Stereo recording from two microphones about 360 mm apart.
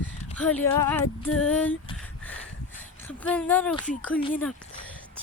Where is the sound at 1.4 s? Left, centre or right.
Centre.